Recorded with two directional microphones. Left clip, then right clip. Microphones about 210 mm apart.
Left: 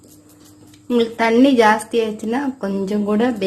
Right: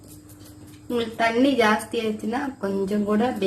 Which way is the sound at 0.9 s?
45° left (ahead or behind).